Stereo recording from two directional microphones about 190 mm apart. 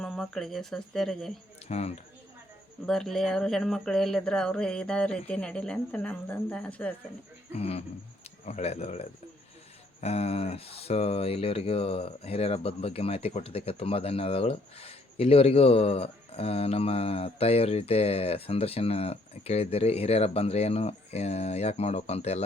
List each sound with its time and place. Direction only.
0.0 s speech: centre (ahead or behind)
1.6 s speech: 35° left (ahead or behind)
2.8 s speech: centre (ahead or behind)
7.5 s speech: 35° left (ahead or behind)